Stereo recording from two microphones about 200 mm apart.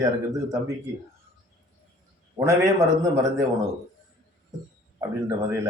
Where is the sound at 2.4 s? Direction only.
15° right (ahead or behind).